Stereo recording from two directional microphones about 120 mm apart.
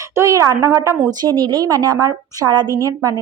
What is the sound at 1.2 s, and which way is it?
A woman's voice, 35° right (ahead or behind).